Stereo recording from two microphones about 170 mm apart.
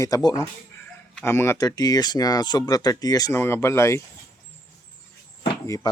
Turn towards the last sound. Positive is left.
turn(degrees=20)  # may be behind; listen again after turning